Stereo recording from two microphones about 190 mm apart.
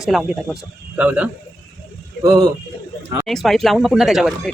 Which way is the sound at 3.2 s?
Centre (ahead or behind).